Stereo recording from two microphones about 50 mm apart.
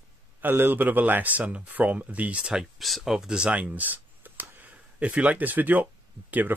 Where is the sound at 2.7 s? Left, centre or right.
Centre.